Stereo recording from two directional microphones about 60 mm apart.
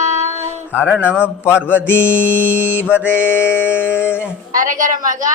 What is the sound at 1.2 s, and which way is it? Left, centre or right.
Speech, left.